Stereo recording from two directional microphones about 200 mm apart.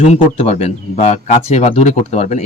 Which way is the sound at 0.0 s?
30° left (ahead or behind).